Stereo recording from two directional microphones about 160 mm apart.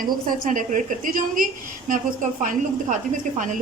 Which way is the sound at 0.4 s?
55° right (ahead or behind).